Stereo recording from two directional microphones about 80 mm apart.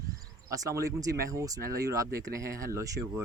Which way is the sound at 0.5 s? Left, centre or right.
Right.